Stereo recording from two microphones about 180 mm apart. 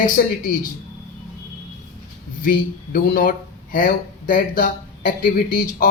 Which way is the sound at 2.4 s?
55° left (ahead or behind).